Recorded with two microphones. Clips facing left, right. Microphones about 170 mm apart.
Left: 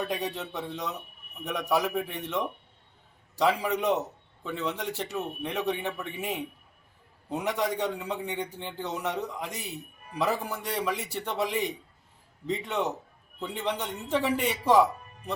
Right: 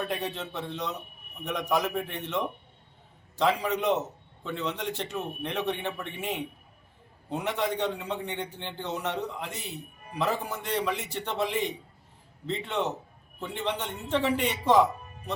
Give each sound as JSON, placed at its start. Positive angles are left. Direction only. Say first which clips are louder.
{"t": 0.1, "sound": "a man's voice", "louder": "left 1 dB", "side_deg": 10}